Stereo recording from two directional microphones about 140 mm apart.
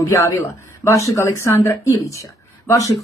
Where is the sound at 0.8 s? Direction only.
20° left (ahead or behind).